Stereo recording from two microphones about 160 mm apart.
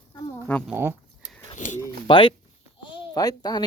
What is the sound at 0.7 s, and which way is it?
Speech, 15° right (ahead or behind).